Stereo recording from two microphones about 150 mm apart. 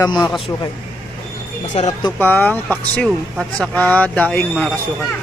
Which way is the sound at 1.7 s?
50° left (ahead or behind).